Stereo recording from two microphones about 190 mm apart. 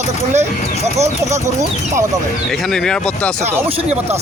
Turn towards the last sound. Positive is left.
turn(degrees=5)  # may be behind; listen again after turning